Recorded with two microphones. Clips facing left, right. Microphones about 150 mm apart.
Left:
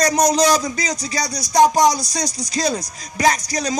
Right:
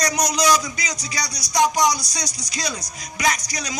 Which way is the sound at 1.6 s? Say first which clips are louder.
Left 5 dB; 50° left (ahead or behind).